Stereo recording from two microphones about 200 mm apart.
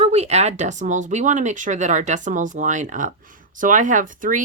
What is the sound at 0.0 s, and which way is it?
Speech, 35° right (ahead or behind).